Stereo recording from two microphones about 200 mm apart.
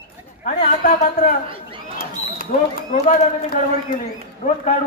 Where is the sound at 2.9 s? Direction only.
45° left (ahead or behind).